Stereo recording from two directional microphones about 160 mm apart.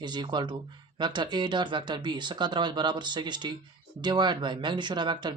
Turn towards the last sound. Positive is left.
turn(degrees=-25)  # may be behind; listen again after turning